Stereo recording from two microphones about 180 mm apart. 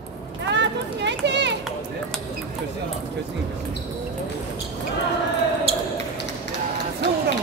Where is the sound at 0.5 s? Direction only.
75° right (ahead or behind).